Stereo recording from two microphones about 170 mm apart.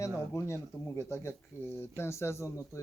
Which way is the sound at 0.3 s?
15° left (ahead or behind).